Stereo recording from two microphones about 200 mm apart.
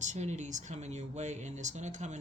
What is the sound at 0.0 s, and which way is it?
Speech, 35° right (ahead or behind).